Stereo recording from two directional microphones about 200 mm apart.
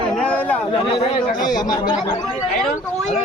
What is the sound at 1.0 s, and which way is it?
Speech, 25° left (ahead or behind).